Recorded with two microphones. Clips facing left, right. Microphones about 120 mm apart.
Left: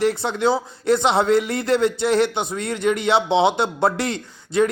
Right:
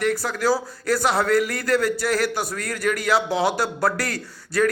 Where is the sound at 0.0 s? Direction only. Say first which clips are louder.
Left 3 dB; 25° left (ahead or behind).